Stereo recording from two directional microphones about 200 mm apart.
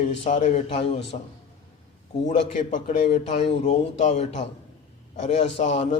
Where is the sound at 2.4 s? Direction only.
35° left (ahead or behind).